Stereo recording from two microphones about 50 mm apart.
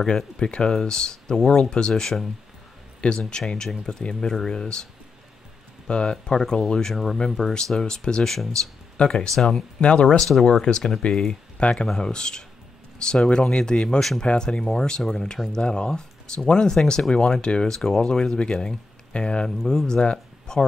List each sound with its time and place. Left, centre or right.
0.4 s speech: centre
5.9 s speech: centre
8.9 s speech: centre
9.3 s speech: centre
9.8 s speech: centre
10.1 s speech: centre